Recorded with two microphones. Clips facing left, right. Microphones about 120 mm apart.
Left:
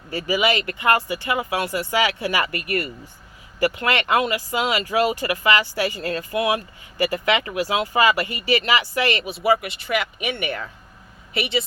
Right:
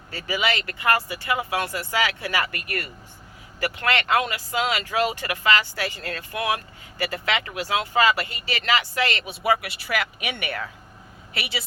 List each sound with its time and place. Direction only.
0.1 s speech: 15° left (ahead or behind)
3.6 s speech: 15° left (ahead or behind)
6.0 s speech: 40° left (ahead or behind)
6.3 s speech: 5° left (ahead or behind)
9.2 s speech: centre (ahead or behind)